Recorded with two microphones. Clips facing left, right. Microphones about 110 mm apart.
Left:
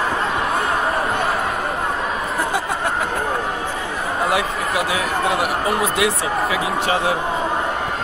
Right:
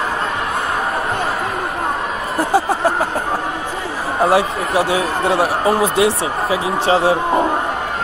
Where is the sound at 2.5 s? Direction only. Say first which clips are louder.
Right 6 dB; 30° right (ahead or behind).